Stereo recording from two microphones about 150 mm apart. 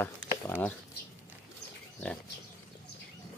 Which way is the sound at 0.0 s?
10° left (ahead or behind).